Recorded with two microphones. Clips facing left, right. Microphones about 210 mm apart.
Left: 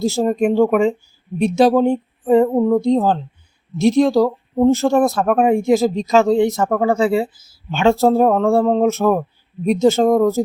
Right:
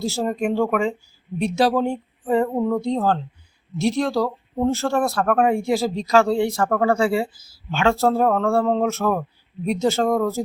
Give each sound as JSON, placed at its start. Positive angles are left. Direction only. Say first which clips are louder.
{"t": 0.0, "sound": "speech", "louder": "left 6 dB", "side_deg": 20}